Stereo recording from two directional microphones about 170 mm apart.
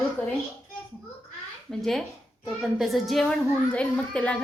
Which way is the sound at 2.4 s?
Centre (ahead or behind).